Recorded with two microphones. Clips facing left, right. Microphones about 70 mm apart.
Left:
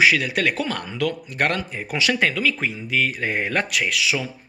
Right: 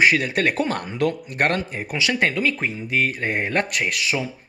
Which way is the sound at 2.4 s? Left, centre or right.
Right.